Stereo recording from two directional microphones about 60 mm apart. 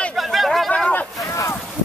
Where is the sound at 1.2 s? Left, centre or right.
Left.